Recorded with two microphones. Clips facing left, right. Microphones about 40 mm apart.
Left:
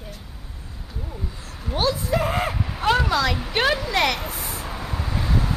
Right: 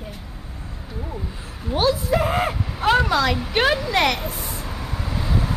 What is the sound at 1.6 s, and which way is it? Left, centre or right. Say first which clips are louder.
Speech: right 3 dB; centre.